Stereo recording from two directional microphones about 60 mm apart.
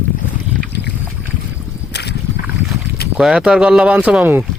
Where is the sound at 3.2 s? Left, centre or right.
Centre.